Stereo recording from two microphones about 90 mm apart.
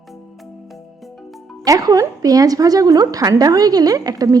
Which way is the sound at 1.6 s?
40° right (ahead or behind).